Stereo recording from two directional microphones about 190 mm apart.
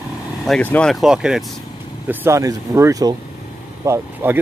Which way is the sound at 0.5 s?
5° left (ahead or behind).